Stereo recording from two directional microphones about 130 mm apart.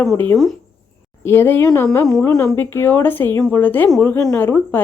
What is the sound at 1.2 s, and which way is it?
Speech, 15° left (ahead or behind).